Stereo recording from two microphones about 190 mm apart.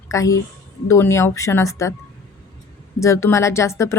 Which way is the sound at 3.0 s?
15° left (ahead or behind).